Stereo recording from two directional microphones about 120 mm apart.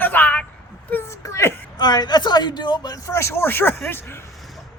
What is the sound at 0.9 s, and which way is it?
Whimper, 20° left (ahead or behind).